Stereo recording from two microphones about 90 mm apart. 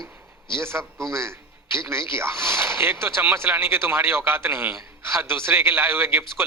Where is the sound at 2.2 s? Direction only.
30° right (ahead or behind).